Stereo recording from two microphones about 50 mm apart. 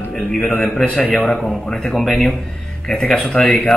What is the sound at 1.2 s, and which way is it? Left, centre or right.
Speech, centre.